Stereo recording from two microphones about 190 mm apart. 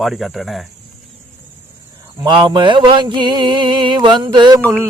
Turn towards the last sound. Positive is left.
turn(degrees=-25)  # may be behind; listen again after turning